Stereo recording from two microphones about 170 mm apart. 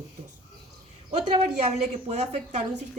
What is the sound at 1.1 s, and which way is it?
A woman's voice, 35° right (ahead or behind).